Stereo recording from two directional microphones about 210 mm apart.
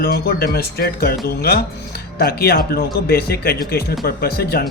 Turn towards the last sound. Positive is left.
turn(degrees=45)  # may be behind; listen again after turning